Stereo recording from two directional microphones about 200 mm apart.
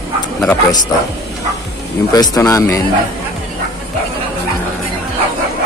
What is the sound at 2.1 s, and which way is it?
Speech, 20° left (ahead or behind).